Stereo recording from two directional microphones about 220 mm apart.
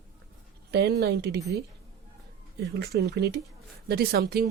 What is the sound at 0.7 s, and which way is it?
Speech, 45° right (ahead or behind).